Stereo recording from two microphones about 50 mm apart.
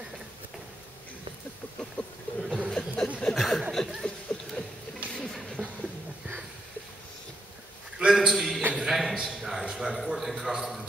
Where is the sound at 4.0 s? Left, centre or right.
Centre.